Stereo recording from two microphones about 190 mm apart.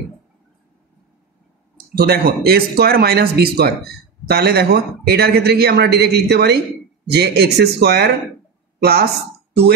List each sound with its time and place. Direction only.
2.0 s a man's voice: 55° right (ahead or behind)